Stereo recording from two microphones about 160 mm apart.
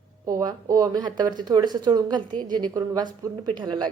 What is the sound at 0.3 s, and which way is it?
Speech, 20° right (ahead or behind).